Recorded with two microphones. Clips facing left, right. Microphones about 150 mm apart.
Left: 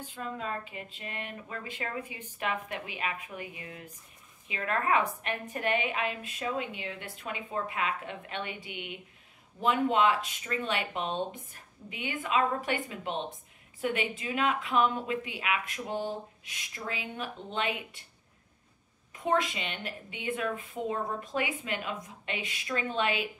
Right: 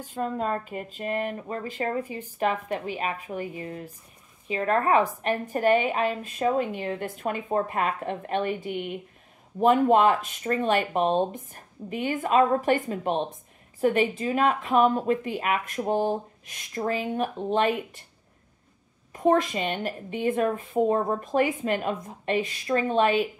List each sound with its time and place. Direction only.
0.0 s a woman's voice: 45° right (ahead or behind)
19.1 s a woman's voice: 40° right (ahead or behind)